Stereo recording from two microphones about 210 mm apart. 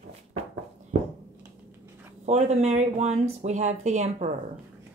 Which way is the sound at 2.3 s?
30° right (ahead or behind).